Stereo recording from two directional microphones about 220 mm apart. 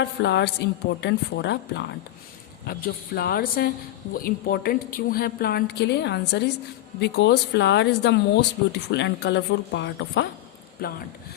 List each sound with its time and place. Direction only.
0.0 s a woman's voice: 50° left (ahead or behind)
10.8 s a woman's voice: 40° left (ahead or behind)